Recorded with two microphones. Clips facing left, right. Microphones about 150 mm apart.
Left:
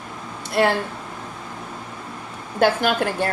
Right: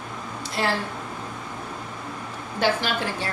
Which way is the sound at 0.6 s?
60° left (ahead or behind).